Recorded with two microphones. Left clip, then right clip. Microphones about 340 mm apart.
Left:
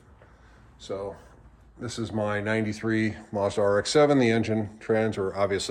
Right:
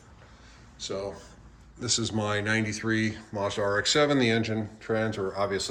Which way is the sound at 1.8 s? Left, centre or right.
Centre.